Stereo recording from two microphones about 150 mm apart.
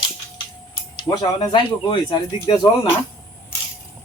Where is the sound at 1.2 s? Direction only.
30° left (ahead or behind).